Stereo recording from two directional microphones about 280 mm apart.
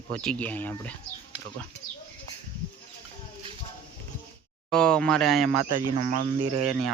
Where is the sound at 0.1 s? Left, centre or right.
Centre.